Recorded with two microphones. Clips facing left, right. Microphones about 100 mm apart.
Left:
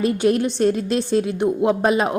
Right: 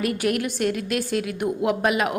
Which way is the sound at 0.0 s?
25° left (ahead or behind).